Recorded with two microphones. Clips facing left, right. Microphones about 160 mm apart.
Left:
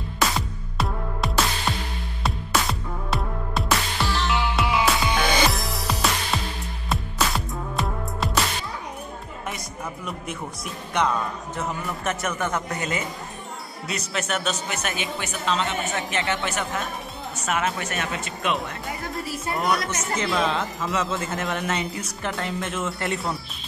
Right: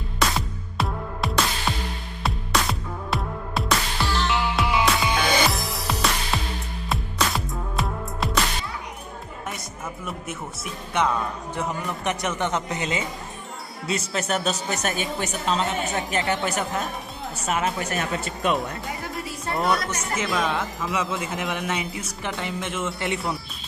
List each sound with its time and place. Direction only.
0.2 s music: centre (ahead or behind)
10.0 s speech: 5° right (ahead or behind); by 18.5 s 30° right (ahead or behind)
19.1 s speech: centre (ahead or behind)